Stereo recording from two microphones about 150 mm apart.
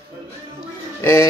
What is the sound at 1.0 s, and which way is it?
Speech, 15° left (ahead or behind).